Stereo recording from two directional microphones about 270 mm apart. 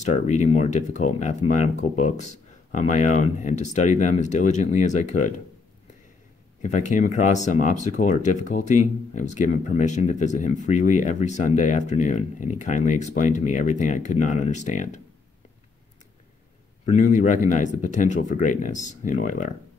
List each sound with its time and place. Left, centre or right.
0.0 s speech: left
6.6 s speech: left
16.9 s speech: left